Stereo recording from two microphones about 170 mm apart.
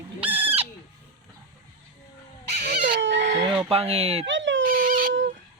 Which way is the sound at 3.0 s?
90° right.